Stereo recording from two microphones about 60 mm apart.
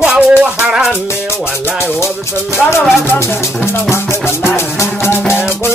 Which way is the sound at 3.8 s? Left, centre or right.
Left.